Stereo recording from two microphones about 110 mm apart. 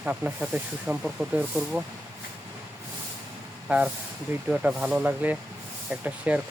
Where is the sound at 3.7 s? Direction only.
10° right (ahead or behind).